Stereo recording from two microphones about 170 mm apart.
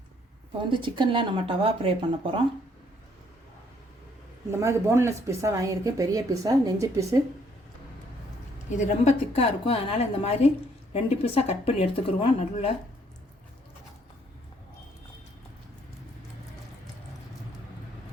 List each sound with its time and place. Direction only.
0.6 s a woman's voice: 30° right (ahead or behind)
4.5 s speech: 15° right (ahead or behind)
8.8 s speech: 35° left (ahead or behind)